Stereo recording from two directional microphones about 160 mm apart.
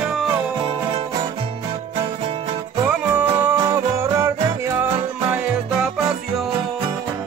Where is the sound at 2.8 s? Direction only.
10° right (ahead or behind).